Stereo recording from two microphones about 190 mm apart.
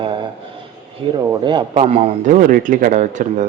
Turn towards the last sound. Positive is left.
turn(degrees=-40)  # may be behind; listen again after turning